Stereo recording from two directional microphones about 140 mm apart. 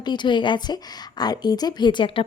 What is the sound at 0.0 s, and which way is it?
Speech, 30° left (ahead or behind).